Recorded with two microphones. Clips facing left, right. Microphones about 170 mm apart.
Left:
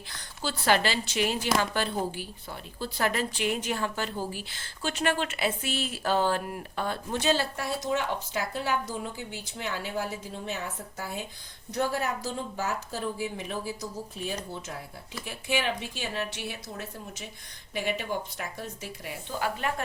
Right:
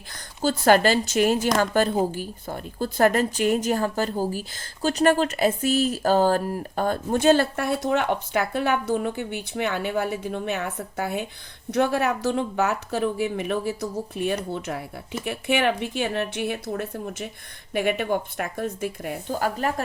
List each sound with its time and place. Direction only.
0.1 s a woman's voice: 45° right (ahead or behind)